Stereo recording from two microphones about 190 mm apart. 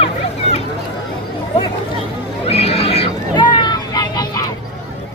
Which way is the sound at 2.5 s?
30° left (ahead or behind).